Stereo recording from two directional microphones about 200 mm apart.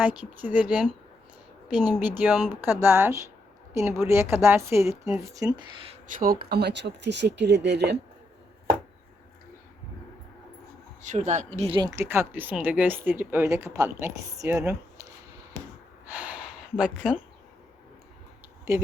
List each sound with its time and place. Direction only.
0.0 s speech: 5° right (ahead or behind)
6.1 s speech: 50° right (ahead or behind)
11.0 s speech: 40° right (ahead or behind)
11.9 s speech: 10° right (ahead or behind)
16.0 s a sound: 5° right (ahead or behind)
18.7 s speech: 15° right (ahead or behind)